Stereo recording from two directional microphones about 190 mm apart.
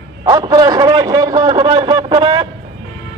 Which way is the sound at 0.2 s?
20° right (ahead or behind).